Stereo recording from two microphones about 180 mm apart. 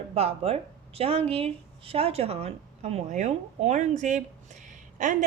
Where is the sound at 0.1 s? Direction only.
35° right (ahead or behind).